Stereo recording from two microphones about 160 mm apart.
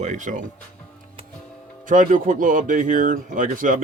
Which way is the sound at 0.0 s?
50° right (ahead or behind).